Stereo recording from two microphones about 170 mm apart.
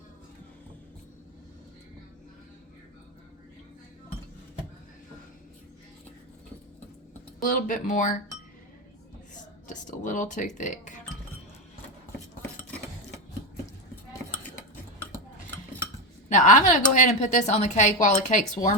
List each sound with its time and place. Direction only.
7.4 s a woman's voice: 50° left (ahead or behind)
9.3 s speech: 50° left (ahead or behind)
16.3 s a woman's voice: 45° left (ahead or behind)